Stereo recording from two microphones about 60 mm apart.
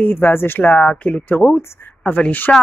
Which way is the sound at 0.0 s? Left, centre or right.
Left.